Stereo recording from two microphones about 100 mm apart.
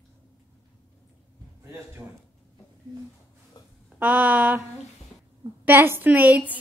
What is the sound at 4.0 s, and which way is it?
A woman's voice, 15° right (ahead or behind).